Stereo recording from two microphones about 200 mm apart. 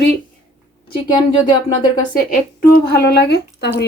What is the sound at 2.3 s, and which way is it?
Speech, 50° left (ahead or behind).